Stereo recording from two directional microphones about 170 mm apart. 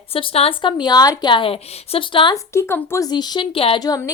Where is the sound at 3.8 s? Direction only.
20° left (ahead or behind).